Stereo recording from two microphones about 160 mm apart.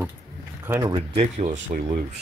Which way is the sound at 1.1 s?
50° right (ahead or behind).